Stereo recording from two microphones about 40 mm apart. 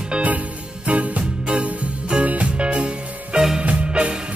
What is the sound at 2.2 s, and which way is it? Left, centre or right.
Music, right.